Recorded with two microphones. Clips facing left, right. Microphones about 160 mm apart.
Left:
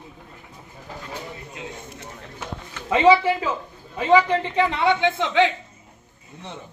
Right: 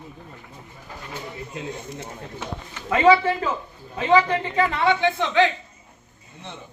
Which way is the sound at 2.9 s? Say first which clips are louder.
Left 1 dB; 15° left (ahead or behind).